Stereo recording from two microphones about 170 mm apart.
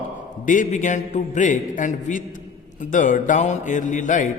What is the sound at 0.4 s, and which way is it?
A man's voice, 50° left (ahead or behind).